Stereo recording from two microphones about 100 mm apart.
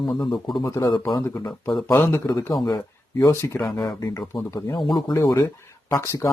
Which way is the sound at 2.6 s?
40° left (ahead or behind).